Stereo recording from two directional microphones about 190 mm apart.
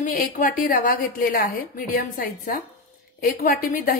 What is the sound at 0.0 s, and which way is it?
A woman's voice, 45° left (ahead or behind).